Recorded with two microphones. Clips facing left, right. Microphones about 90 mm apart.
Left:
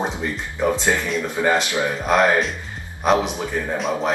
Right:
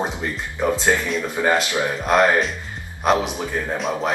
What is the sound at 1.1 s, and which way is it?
Speech, centre (ahead or behind).